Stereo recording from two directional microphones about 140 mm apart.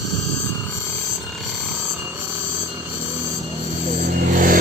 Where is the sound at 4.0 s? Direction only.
85° right.